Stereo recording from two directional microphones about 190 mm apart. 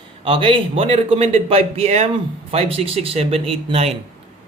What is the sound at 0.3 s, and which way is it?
A man's voice, 25° right (ahead or behind).